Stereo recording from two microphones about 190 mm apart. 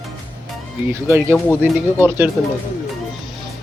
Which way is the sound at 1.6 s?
10° right (ahead or behind).